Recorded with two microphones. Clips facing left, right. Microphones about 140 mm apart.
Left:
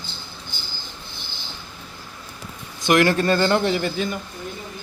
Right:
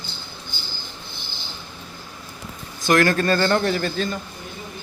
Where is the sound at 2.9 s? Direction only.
20° left (ahead or behind).